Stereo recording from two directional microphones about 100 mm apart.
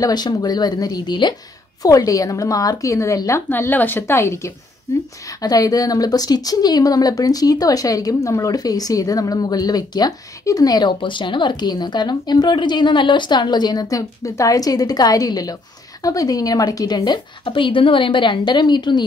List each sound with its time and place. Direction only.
0.0 s a woman's voice: 45° left (ahead or behind)
1.8 s speech: 35° left (ahead or behind)
5.4 s a woman's voice: 40° left (ahead or behind)